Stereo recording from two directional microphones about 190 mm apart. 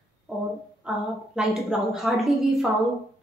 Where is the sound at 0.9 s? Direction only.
5° right (ahead or behind).